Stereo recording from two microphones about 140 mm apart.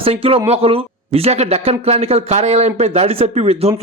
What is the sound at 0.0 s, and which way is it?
Speech, 45° right (ahead or behind).